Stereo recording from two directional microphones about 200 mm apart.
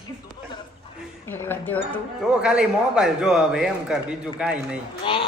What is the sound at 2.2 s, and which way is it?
A man's voice, 5° right (ahead or behind).